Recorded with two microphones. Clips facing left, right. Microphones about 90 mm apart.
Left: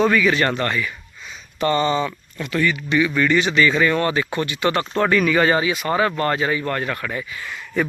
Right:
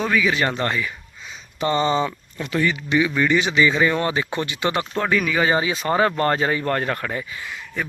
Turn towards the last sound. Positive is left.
turn(degrees=0)  # may be behind; listen again after turning